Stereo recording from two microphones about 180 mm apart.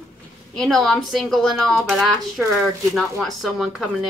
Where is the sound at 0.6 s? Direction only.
Centre (ahead or behind).